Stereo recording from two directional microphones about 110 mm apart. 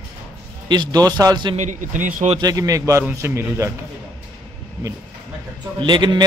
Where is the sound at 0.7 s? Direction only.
40° right (ahead or behind).